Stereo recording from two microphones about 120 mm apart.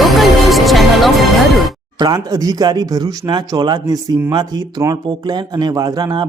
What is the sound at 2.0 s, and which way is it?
Speech, 35° right (ahead or behind).